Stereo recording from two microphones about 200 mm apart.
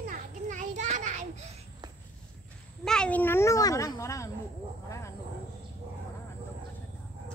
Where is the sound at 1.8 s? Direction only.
20° right (ahead or behind).